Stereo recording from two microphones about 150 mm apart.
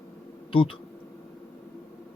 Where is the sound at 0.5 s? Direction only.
35° left (ahead or behind).